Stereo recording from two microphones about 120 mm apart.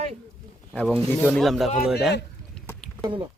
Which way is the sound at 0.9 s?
5° left (ahead or behind).